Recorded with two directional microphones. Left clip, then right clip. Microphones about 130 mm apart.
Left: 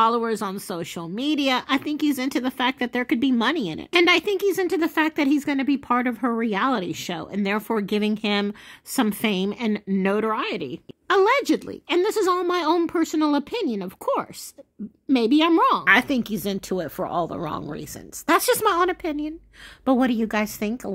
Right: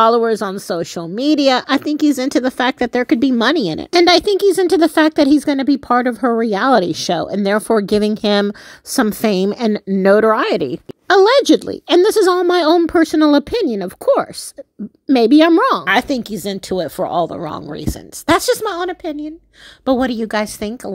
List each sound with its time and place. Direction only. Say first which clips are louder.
0.0 s speech: right 8 dB; 35° right (ahead or behind)
6.7 s a woman's voice: right 13 dB; 50° right (ahead or behind)
11.1 s a woman's voice: right 9 dB; 40° right (ahead or behind)
18.4 s a woman's voice: right 2 dB; 15° right (ahead or behind)
19.8 s speech: right 5 dB; 35° right (ahead or behind)